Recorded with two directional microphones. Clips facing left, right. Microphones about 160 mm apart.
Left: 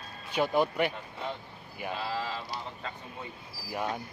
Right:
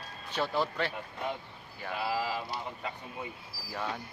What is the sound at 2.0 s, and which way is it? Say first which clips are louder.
Speech: right 5 dB; 10° right (ahead or behind).